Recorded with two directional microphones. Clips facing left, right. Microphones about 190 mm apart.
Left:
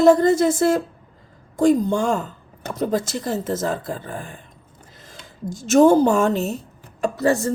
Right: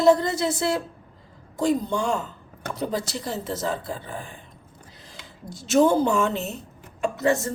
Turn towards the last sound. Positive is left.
turn(degrees=35)  # may be behind; listen again after turning